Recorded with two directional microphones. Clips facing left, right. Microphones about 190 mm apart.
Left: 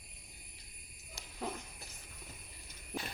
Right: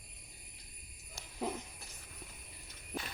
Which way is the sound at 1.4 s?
15° right (ahead or behind).